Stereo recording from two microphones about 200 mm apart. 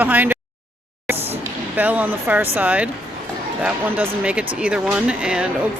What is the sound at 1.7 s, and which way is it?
Speech, 10° right (ahead or behind).